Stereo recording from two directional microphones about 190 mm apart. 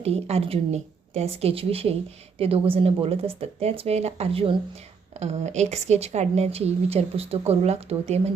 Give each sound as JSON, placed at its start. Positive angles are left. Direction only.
{"t": 0.0, "sound": "speech", "side_deg": -30}